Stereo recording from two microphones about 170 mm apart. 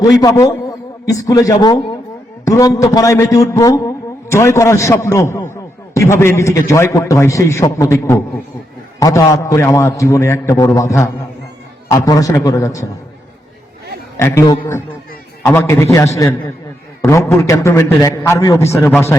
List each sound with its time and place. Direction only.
0.0 s a man's voice: 20° left (ahead or behind)
14.2 s a man's voice: 15° left (ahead or behind)